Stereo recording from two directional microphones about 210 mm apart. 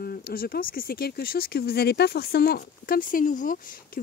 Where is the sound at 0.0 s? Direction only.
45° left (ahead or behind).